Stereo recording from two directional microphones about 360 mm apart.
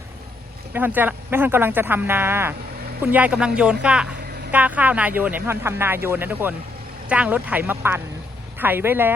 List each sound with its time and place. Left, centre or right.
0.7 s speech: centre